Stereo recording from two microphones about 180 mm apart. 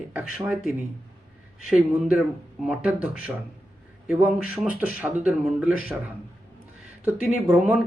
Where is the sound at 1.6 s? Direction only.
5° right (ahead or behind).